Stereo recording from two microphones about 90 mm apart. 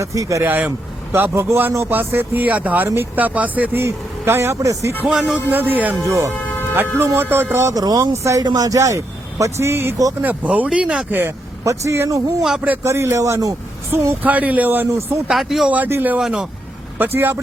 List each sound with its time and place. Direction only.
0.0 s speech: 35° right (ahead or behind)
0.4 s speech: 20° right (ahead or behind); by 4.9 s 35° right (ahead or behind)
5.0 s speech: 5° right (ahead or behind)
5.5 s speech: 20° right (ahead or behind)
6.1 s speech: 35° right (ahead or behind)
10.2 s speech: 20° right (ahead or behind)
11.2 s speech: 30° right (ahead or behind)
12.4 s speech: 5° right (ahead or behind)
12.8 s speech: 30° right (ahead or behind)
14.3 s speech: 15° right (ahead or behind)
15.3 s speech: centre (ahead or behind)
15.7 s speech: 20° right (ahead or behind)
16.1 s speech: 5° right (ahead or behind)
17.2 s speech: 25° right (ahead or behind)